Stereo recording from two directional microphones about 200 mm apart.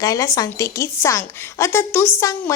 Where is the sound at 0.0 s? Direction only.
15° left (ahead or behind).